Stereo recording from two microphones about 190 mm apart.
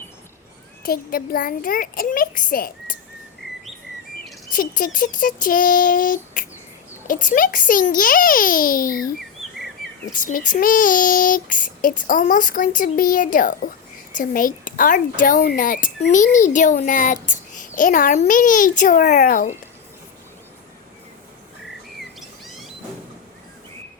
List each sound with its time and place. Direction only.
0.8 s child singing: 50° left (ahead or behind)
4.2 s child singing: 45° left (ahead or behind)